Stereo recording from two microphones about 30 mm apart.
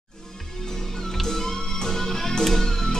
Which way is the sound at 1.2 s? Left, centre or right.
Centre.